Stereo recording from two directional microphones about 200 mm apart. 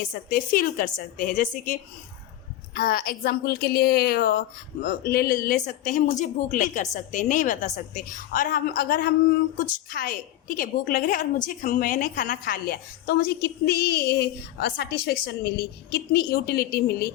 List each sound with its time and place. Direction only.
0.1 s a woman's voice: 45° left (ahead or behind)